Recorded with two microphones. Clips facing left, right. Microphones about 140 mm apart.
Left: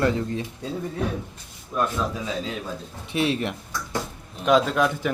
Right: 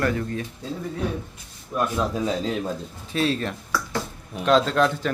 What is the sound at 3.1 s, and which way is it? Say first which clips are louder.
A man's voice: even; 20° left (ahead or behind).